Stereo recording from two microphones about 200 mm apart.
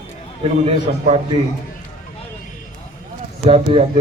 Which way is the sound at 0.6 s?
30° right (ahead or behind).